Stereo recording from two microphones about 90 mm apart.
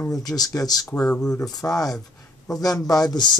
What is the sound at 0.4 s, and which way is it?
Speech, 40° left (ahead or behind).